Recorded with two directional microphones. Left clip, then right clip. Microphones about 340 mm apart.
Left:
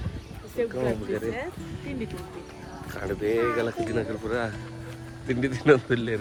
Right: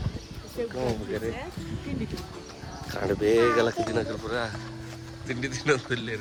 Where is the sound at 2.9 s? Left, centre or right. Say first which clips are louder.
Right 3 dB; right; by 6.1 s centre.